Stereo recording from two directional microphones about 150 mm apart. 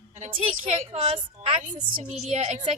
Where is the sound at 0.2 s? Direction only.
40° right (ahead or behind).